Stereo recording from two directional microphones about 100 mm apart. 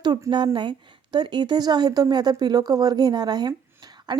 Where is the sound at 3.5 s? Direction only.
40° right (ahead or behind).